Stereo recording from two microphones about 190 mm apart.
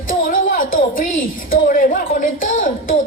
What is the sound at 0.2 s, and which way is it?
A woman's voice, 45° left (ahead or behind).